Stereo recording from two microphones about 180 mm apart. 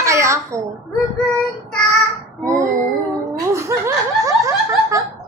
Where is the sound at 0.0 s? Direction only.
15° right (ahead or behind).